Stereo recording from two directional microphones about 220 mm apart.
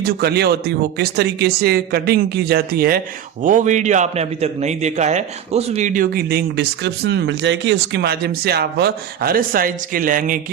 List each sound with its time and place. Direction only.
0.0 s a man's voice: 45° right (ahead or behind)